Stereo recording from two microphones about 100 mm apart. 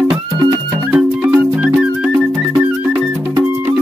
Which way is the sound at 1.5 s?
10° right (ahead or behind).